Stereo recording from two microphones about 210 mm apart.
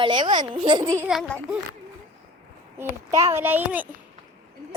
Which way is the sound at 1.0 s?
5° right (ahead or behind).